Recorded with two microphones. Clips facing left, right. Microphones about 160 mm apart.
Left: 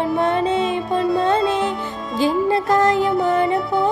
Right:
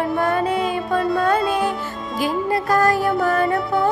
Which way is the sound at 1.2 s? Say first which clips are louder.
Left 1 dB; 25° left (ahead or behind).